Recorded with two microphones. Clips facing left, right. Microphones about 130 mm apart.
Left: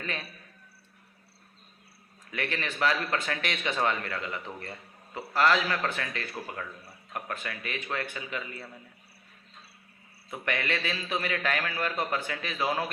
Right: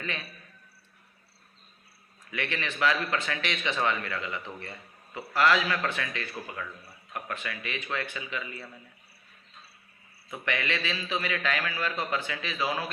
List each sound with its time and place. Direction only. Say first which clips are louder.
2.3 s a man's voice: even; 40° left (ahead or behind)
10.2 s a man's voice: even; 45° left (ahead or behind)